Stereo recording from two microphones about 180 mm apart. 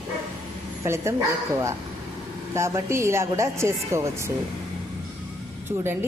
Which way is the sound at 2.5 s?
15° right (ahead or behind).